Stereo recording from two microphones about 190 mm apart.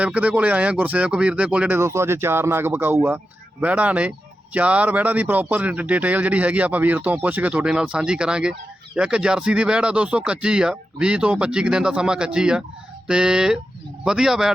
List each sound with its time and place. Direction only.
0.0 s speech: 5° right (ahead or behind)